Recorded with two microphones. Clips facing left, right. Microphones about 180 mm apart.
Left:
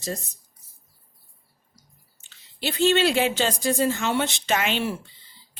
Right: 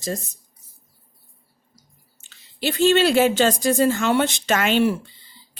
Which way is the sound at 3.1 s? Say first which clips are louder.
Right 6 dB; 45° right (ahead or behind).